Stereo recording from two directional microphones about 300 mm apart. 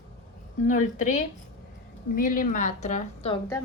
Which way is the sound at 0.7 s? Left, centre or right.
Left.